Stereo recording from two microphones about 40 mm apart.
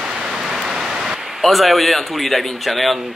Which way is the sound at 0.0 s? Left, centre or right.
Centre.